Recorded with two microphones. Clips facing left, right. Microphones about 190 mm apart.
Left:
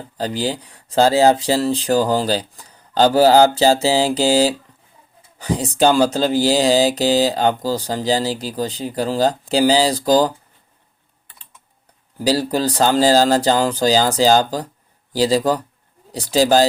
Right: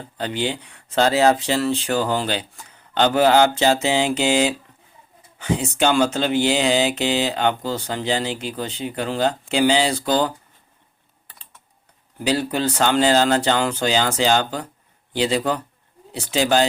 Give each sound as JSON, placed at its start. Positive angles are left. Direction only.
{"t": 0.2, "sound": "speech", "side_deg": 35}
{"t": 12.2, "sound": "speech", "side_deg": 35}